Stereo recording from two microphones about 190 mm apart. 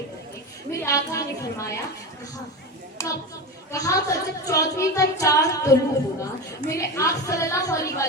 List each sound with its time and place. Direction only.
0.8 s speech: 15° left (ahead or behind)
3.0 s speech: 15° left (ahead or behind)